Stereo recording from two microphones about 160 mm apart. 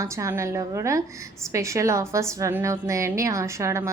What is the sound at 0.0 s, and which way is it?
A woman's voice, 20° right (ahead or behind).